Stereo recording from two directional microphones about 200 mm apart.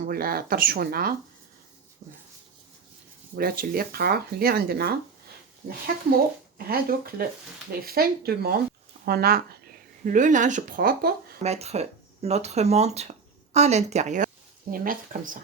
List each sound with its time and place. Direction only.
0.0 s speech: 45° right (ahead or behind)
3.3 s speech: 50° right (ahead or behind)
6.7 s speech: 50° right (ahead or behind)
10.0 s speech: 40° right (ahead or behind)
11.4 s speech: 30° right (ahead or behind)